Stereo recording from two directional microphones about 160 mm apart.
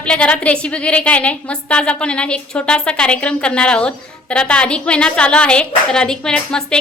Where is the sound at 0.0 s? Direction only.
5° left (ahead or behind).